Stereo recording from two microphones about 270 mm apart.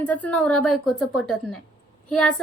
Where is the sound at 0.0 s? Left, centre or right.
Centre.